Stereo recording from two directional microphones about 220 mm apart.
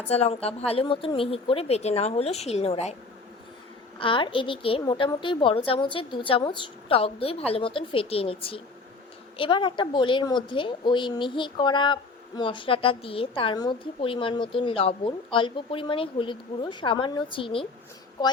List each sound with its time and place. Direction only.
0.1 s a woman's voice: 30° left (ahead or behind)
3.9 s a woman's voice: 25° left (ahead or behind)